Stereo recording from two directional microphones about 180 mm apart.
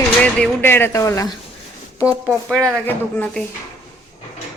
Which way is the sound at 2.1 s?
10° right (ahead or behind).